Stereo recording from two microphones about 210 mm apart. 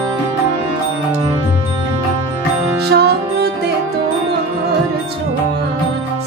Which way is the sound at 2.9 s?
50° right (ahead or behind).